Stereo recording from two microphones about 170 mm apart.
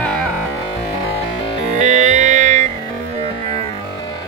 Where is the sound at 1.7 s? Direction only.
45° right (ahead or behind).